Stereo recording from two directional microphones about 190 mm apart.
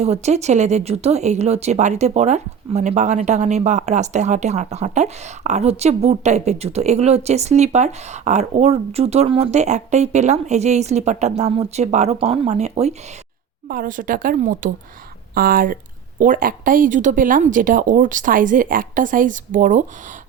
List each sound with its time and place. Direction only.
0.0 s speech: 35° right (ahead or behind)
13.7 s a woman's voice: 45° right (ahead or behind)